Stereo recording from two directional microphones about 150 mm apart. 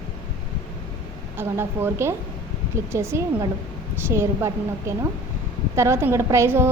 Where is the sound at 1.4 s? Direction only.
15° right (ahead or behind).